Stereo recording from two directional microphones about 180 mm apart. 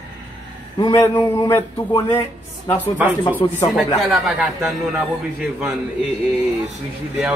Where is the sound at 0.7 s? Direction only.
25° left (ahead or behind).